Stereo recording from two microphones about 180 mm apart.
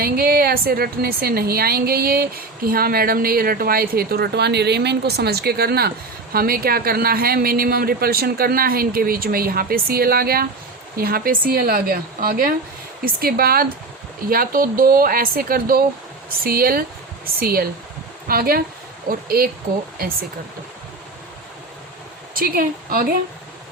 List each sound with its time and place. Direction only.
0.0 s a woman's voice: 55° right (ahead or behind)
22.4 s speech: 55° right (ahead or behind)